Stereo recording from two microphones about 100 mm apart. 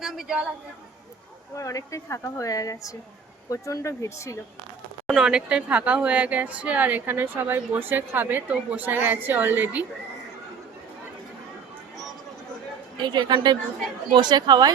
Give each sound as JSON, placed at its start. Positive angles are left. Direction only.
{"t": 0.0, "sound": "a woman's voice", "side_deg": -5}
{"t": 1.5, "sound": "a woman's voice", "side_deg": 30}
{"t": 5.0, "sound": "speech", "side_deg": -5}
{"t": 13.0, "sound": "speech", "side_deg": -50}